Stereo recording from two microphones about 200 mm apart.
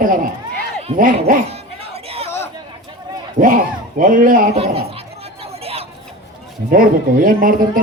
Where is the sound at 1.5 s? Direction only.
30° right (ahead or behind).